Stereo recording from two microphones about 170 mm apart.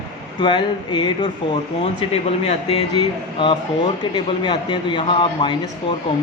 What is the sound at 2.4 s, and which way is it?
A man's voice, 35° left (ahead or behind).